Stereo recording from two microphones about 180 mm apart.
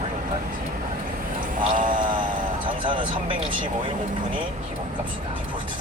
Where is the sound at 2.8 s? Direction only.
25° right (ahead or behind).